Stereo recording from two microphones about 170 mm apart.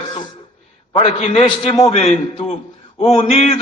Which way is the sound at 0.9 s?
40° left (ahead or behind).